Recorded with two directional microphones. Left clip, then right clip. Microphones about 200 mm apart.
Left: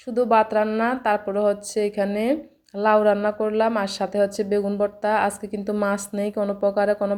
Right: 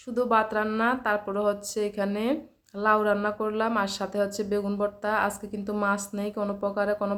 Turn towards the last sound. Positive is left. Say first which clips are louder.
# left 6 dB
turn(degrees=15)  # may be behind; listen again after turning